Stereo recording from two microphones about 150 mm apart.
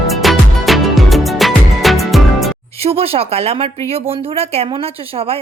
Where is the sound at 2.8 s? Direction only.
40° right (ahead or behind).